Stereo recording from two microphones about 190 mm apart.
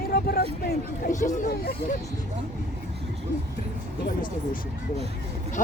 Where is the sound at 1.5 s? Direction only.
55° left (ahead or behind).